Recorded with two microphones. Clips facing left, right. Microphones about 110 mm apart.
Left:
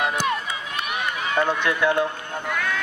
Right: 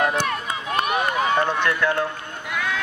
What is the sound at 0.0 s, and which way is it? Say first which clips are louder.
Run: right 1 dB; 10° left (ahead or behind).